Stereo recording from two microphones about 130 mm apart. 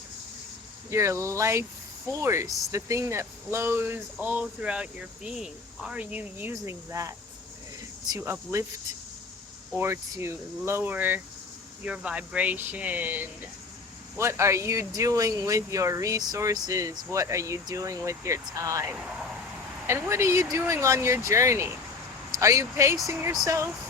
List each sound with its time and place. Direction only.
0.9 s speech: 20° right (ahead or behind)
6.5 s speech: 25° right (ahead or behind)
8.2 s speech: 20° right (ahead or behind)
9.7 s speech: 20° right (ahead or behind)
18.9 s speech: 5° right (ahead or behind)
19.9 s speech: 20° right (ahead or behind)